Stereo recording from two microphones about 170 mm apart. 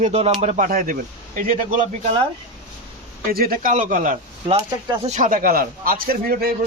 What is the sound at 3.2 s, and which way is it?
A man's voice, 60° right (ahead or behind).